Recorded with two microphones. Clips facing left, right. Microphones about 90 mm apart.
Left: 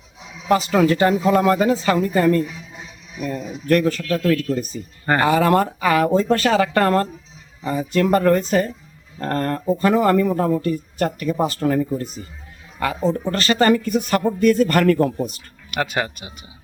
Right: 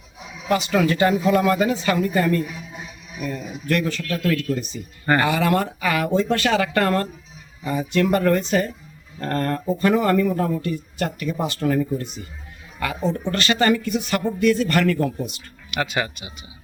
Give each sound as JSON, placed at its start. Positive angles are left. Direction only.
{"t": 0.4, "sound": "speech", "side_deg": 30}